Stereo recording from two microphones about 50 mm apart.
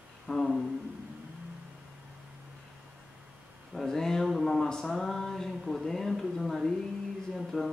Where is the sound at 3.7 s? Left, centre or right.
Centre.